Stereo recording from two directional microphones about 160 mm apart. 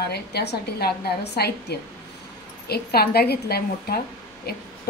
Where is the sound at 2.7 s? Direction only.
80° left.